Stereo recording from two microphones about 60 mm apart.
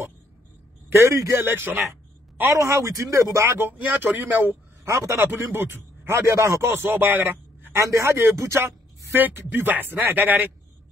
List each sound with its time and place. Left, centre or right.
0.9 s speech: right
1.4 s speech: right
2.5 s speech: right
3.4 s speech: right
4.8 s speech: right
5.2 s speech: right
6.6 s a man's voice: right
7.7 s speech: right
8.5 s speech: right